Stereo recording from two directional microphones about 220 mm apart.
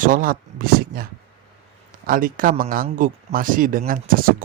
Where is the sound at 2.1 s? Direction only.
40° right (ahead or behind).